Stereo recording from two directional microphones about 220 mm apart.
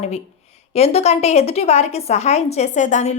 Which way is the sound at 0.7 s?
30° left (ahead or behind).